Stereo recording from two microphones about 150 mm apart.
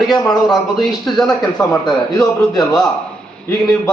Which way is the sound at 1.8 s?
25° left (ahead or behind).